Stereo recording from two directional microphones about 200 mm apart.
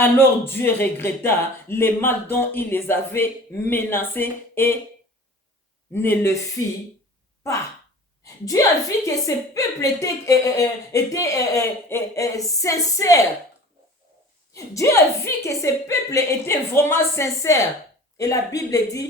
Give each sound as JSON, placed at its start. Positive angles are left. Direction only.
{"t": 0.0, "sound": "speech", "side_deg": 10}
{"t": 5.9, "sound": "speech", "side_deg": 10}
{"t": 8.2, "sound": "a woman's voice", "side_deg": 15}
{"t": 14.5, "sound": "speech", "side_deg": 15}